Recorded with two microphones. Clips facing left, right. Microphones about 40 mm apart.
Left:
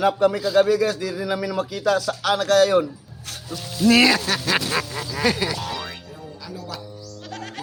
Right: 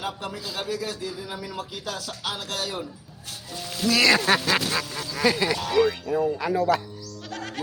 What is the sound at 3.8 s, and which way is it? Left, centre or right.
Speech, right.